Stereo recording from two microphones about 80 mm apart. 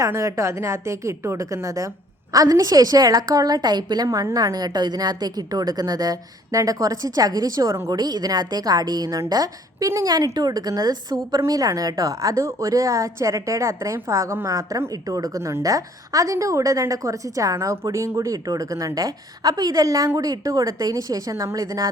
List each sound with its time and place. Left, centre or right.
0.0 s a woman's voice: right
7.9 s a woman's voice: right